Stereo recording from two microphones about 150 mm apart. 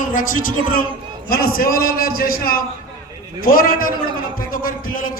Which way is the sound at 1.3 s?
75° left (ahead or behind).